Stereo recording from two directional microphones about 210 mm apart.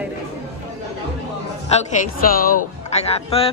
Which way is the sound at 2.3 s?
40° left (ahead or behind).